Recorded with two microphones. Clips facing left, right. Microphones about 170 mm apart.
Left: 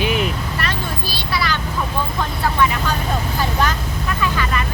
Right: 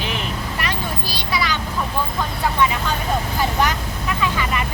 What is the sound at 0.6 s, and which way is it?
Vehicle, 15° right (ahead or behind).